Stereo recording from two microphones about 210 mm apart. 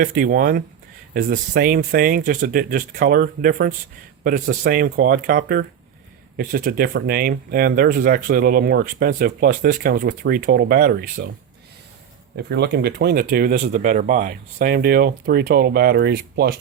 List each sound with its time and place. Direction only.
0.0 s speech: 45° right (ahead or behind)
12.4 s speech: 50° right (ahead or behind)